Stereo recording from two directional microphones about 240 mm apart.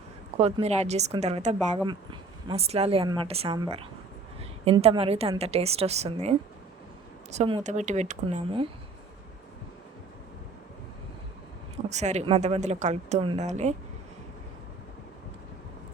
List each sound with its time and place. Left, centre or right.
0.3 s a woman's voice: right
11.9 s a woman's voice: right